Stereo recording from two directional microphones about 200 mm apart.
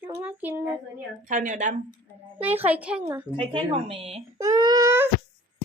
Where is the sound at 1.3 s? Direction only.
40° right (ahead or behind).